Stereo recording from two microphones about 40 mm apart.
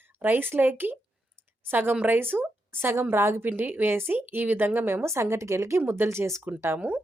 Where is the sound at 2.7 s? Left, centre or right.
Right.